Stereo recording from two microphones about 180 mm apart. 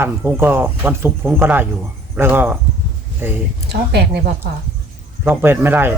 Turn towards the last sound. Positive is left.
turn(degrees=-10)  # may be behind; listen again after turning